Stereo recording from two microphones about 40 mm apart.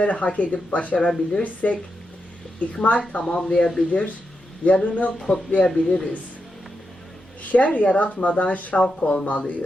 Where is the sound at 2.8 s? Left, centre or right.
Left.